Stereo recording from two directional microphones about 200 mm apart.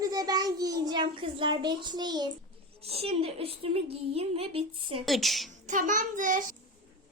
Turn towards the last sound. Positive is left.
turn(degrees=-40)  # may be behind; listen again after turning